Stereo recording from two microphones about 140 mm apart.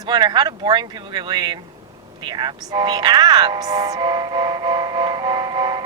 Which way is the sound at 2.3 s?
30° right (ahead or behind).